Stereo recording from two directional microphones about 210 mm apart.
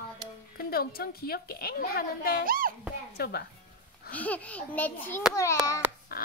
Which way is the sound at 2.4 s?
45° right (ahead or behind).